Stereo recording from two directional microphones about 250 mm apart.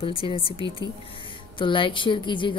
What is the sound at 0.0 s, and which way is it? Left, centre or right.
Speech, left.